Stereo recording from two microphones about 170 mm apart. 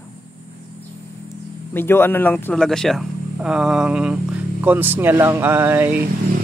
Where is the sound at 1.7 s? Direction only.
15° left (ahead or behind); by 6.0 s 10° right (ahead or behind).